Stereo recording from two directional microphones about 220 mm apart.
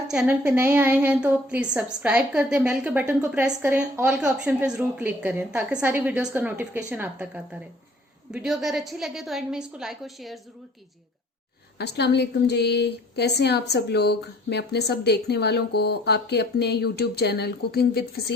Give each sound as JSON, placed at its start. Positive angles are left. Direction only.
{"t": 0.1, "sound": "a woman's voice", "side_deg": -5}
{"t": 11.8, "sound": "a woman's voice", "side_deg": 50}